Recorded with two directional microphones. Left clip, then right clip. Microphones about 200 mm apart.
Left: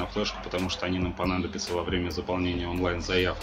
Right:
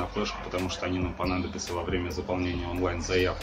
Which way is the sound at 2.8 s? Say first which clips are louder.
Even; 40° left (ahead or behind).